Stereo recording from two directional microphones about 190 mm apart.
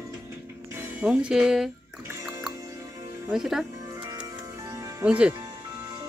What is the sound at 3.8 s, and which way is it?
Music, 20° right (ahead or behind).